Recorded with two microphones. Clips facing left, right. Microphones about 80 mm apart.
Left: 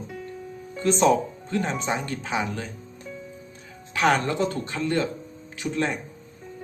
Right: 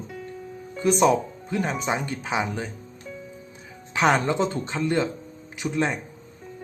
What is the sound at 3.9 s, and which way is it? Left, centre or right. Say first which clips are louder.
Speech: right 1 dB; centre.